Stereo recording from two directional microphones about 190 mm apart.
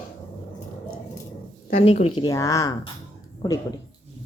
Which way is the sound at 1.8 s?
35° left (ahead or behind).